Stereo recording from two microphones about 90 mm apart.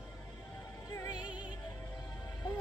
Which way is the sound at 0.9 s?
40° left (ahead or behind).